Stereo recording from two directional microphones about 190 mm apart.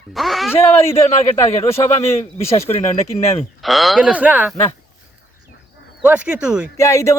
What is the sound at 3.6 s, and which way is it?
Speech, centre (ahead or behind).